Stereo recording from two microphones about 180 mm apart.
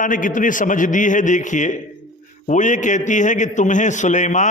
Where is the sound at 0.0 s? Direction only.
45° left (ahead or behind).